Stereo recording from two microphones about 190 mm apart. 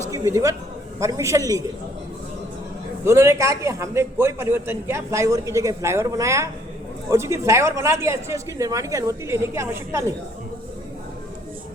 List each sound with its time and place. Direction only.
0.1 s a man's voice: 15° right (ahead or behind)
3.0 s a man's voice: 15° right (ahead or behind)